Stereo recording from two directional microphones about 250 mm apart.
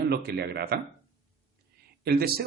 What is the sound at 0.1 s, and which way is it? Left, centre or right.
Speech, right.